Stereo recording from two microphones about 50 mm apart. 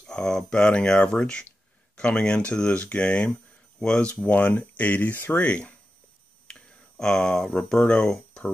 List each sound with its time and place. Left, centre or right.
0.0 s speech: centre
6.4 s a sound: centre
7.8 s speech: centre